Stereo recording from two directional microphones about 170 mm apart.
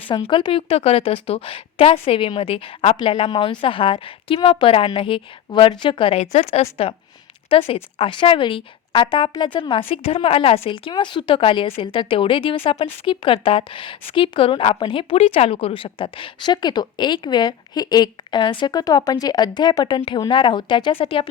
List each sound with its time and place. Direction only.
0.1 s a woman's voice: 30° left (ahead or behind)